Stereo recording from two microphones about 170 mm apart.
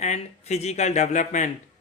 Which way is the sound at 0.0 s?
40° left (ahead or behind).